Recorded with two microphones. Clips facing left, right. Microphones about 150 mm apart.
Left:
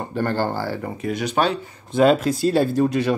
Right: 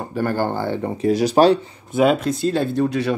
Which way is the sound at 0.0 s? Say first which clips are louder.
Right 1 dB; 10° right (ahead or behind).